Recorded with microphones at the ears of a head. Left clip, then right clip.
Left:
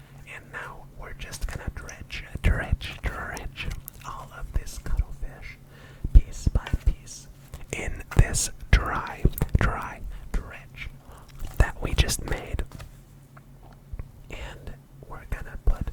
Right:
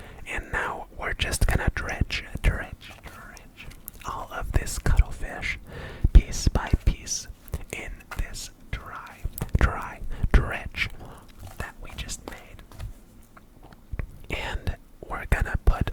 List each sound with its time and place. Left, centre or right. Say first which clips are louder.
0.0 s whispering: right 8 dB; right
2.6 s whispering: left 8 dB; left
4.1 s whispering: right 8 dB; right
7.9 s whispering: left 9 dB; left
9.5 s whispering: right 3 dB; centre
10.1 s whispering: right 12 dB; right
11.5 s whispering: left 9 dB; left
13.9 s whispering: right 9 dB; right